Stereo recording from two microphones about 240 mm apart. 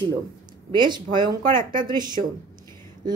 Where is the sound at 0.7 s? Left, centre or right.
Centre.